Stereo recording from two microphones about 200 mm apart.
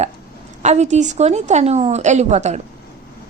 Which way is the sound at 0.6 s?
35° right (ahead or behind).